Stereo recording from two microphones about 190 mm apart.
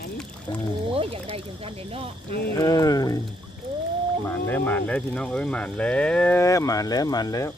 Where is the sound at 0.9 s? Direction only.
30° right (ahead or behind).